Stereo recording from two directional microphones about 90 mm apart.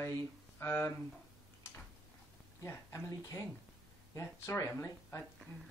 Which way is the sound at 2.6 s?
30° left (ahead or behind).